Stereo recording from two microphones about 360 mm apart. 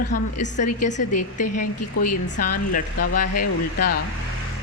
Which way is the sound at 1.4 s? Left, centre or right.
Left.